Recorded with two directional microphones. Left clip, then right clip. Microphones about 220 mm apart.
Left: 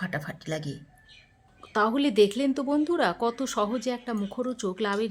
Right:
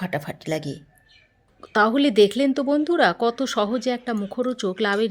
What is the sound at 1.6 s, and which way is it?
Speech, 20° right (ahead or behind).